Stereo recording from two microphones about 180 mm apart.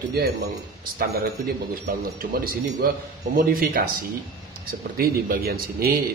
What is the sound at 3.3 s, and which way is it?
Speech, 55° right (ahead or behind).